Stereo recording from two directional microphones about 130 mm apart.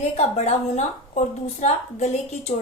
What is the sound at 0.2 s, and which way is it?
A woman's voice, 60° left (ahead or behind).